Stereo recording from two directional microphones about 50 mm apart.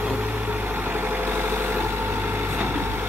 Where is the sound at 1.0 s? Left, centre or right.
Right.